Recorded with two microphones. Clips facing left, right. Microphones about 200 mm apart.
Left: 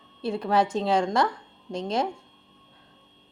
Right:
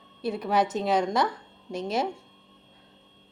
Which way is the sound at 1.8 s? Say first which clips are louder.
Left 1 dB; 5° right (ahead or behind).